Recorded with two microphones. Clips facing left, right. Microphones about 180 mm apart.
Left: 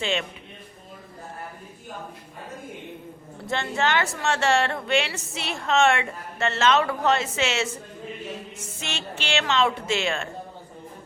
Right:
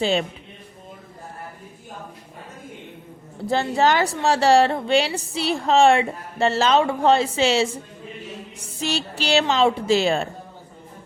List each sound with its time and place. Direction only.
0.0 s a woman's voice: 35° right (ahead or behind)
3.4 s a woman's voice: 35° right (ahead or behind)